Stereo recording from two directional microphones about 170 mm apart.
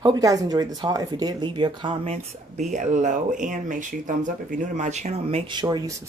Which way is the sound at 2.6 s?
45° right (ahead or behind).